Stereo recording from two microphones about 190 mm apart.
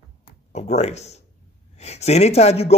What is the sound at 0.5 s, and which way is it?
Speech, 35° left (ahead or behind).